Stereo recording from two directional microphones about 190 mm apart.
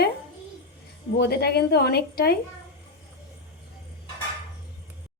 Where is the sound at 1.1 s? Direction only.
60° left (ahead or behind).